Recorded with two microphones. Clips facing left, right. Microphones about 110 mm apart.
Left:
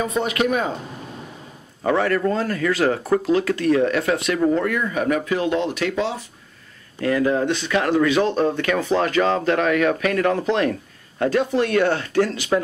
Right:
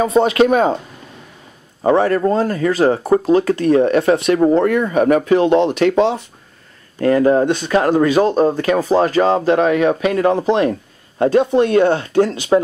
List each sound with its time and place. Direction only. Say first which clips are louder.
0.0 s speech: right 8 dB; 30° right (ahead or behind)
1.8 s speech: right 6 dB; 30° right (ahead or behind)
4.7 s speech: right 8 dB; 45° right (ahead or behind)
5.4 s speech: right 8 dB; 25° right (ahead or behind)
7.0 s speech: right 7 dB; 40° right (ahead or behind); by 12.6 s 25° right (ahead or behind)